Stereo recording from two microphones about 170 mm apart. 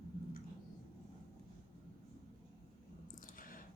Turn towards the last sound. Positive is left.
turn(degrees=55)  # may be behind; listen again after turning